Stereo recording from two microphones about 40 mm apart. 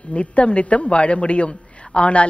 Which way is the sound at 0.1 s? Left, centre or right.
Left.